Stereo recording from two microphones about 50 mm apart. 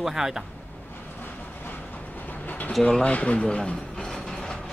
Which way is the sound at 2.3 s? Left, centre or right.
Left.